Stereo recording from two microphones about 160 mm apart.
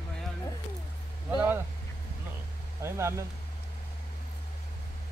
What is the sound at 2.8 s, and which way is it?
Speech, 15° right (ahead or behind).